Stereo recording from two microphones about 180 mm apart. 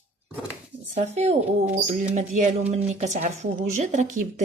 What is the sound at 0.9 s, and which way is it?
Speech, 35° right (ahead or behind).